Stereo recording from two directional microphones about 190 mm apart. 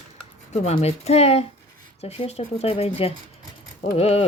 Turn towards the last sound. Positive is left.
turn(degrees=35)  # may be behind; listen again after turning